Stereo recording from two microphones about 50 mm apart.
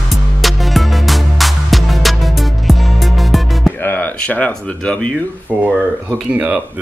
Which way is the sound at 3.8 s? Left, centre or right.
Left.